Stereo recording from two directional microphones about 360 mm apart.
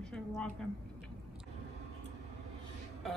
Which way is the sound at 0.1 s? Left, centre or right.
Centre.